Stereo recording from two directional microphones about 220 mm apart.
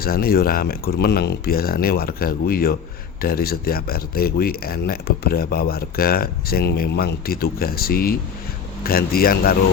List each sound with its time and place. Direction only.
0.0 s speech: 40° left (ahead or behind)